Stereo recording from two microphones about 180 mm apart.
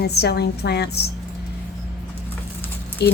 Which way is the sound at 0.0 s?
65° left (ahead or behind).